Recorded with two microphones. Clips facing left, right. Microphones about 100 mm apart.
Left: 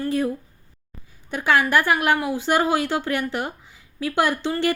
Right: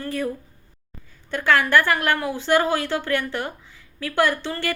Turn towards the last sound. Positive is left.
turn(degrees=15)  # may be behind; listen again after turning